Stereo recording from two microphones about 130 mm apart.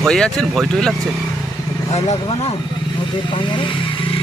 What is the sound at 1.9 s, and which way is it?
Speech, 55° left (ahead or behind).